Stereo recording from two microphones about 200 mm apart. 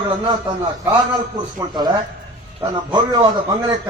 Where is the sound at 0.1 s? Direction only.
25° right (ahead or behind).